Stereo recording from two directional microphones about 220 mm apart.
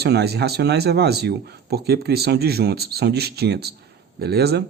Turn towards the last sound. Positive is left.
turn(degrees=-45)  # may be behind; listen again after turning